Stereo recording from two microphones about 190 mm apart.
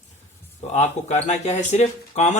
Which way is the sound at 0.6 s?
40° left (ahead or behind).